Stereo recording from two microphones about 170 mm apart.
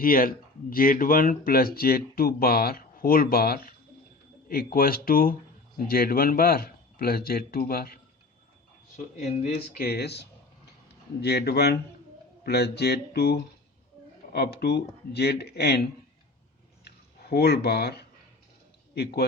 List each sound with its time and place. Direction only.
0.0 s speech: 55° left (ahead or behind)
9.7 s speech: 65° left (ahead or behind)
16.8 s a sound: 70° left (ahead or behind)